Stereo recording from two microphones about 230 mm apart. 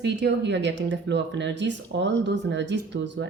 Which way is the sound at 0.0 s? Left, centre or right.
Right.